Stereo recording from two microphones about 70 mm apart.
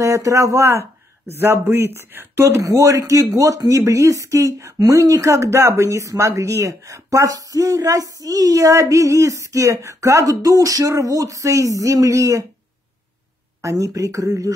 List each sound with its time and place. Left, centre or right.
0.0 s speech: right
1.4 s speech: right
13.6 s speech: right